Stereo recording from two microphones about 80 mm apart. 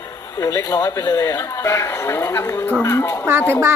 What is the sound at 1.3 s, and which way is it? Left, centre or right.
A man's voice, left.